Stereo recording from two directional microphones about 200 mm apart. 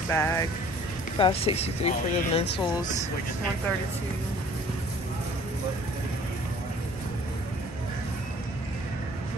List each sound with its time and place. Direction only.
0.1 s speech: 15° left (ahead or behind)
1.1 s speech: 25° left (ahead or behind)